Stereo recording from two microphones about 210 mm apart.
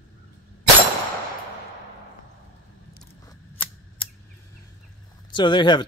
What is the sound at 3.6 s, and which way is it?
Scissors, 10° left (ahead or behind).